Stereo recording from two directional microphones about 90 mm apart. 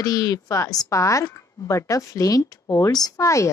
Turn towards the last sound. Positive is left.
turn(degrees=35)  # may be behind; listen again after turning